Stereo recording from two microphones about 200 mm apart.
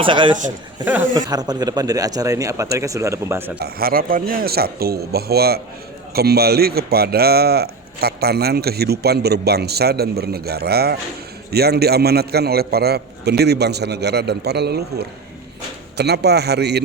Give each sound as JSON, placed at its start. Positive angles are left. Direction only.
{"t": 0.0, "sound": "speech", "side_deg": -25}
{"t": 0.9, "sound": "speech", "side_deg": -15}
{"t": 3.6, "sound": "a man's voice", "side_deg": -50}